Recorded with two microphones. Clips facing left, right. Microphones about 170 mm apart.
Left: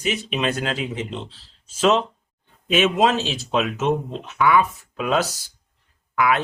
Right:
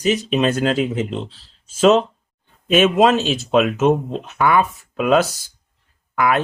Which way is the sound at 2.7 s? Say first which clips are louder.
Right 5 dB; 50° right (ahead or behind).